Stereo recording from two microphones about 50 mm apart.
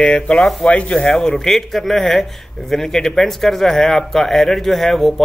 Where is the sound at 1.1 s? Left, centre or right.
Centre.